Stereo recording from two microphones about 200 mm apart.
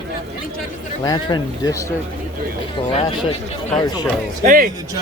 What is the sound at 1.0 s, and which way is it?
Speech, 20° left (ahead or behind).